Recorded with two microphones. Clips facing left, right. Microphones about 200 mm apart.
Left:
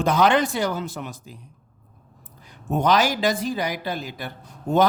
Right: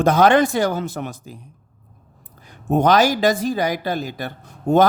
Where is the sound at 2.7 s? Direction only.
50° right (ahead or behind).